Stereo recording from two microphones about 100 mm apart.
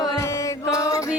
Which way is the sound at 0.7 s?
35° left (ahead or behind).